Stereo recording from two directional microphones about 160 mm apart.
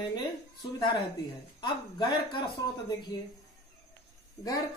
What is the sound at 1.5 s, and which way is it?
Speech, 30° left (ahead or behind).